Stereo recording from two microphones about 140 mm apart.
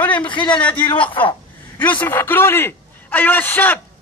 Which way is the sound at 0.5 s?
10° left (ahead or behind).